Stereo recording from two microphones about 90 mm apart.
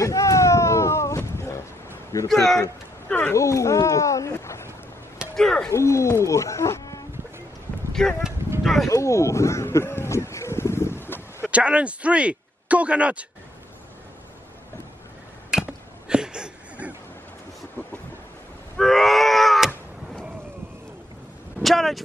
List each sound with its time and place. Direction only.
0.0 s a sound: 35° left (ahead or behind)
2.2 s a man's voice: 5° left (ahead or behind)
3.1 s speech: 20° left (ahead or behind)
3.3 s speech: 35° left (ahead or behind)
5.3 s speech: 5° left (ahead or behind)
5.7 s speech: 35° left (ahead or behind)
8.0 s speech: 5° left (ahead or behind)
8.8 s speech: 35° left (ahead or behind)
11.5 s speech: 15° right (ahead or behind)
15.6 s chop: 10° right (ahead or behind)
18.8 s screaming: centre (ahead or behind)
21.5 s speech: centre (ahead or behind)